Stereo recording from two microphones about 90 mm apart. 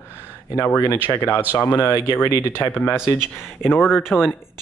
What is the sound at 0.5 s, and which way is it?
Speech, 25° left (ahead or behind).